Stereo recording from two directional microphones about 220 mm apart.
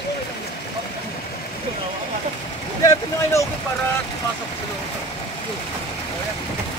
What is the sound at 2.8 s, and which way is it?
Speech, 15° left (ahead or behind).